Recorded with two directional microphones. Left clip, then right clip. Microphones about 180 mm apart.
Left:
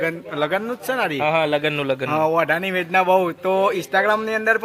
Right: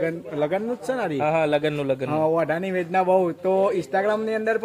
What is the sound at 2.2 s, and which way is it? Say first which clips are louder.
Speech: left 4 dB; 10° right (ahead or behind).